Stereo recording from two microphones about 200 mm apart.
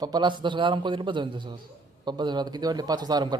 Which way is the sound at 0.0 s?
20° right (ahead or behind).